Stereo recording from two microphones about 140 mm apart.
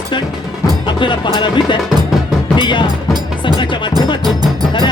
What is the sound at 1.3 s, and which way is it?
Speech, 35° left (ahead or behind).